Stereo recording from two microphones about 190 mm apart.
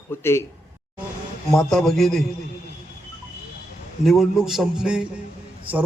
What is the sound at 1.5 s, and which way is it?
Speech, centre (ahead or behind).